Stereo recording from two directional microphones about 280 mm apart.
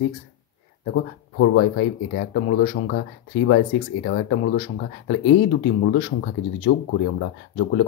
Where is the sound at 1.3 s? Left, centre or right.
Left.